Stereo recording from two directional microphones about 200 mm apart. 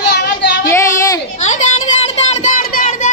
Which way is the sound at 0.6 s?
15° left (ahead or behind).